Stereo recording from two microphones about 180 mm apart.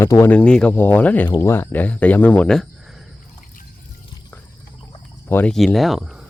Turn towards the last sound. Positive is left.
turn(degrees=0)  # may be behind; listen again after turning